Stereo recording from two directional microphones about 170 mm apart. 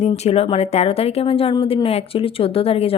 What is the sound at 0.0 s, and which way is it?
Speech, 40° left (ahead or behind).